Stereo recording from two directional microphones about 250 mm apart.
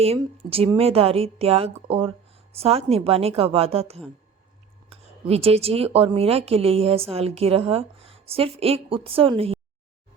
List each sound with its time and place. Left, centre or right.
0.0 s speech: right